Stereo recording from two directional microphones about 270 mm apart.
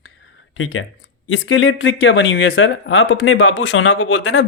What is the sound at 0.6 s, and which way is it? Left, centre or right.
A man's voice, left.